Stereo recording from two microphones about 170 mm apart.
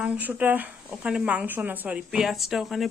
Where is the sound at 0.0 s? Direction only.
10° right (ahead or behind).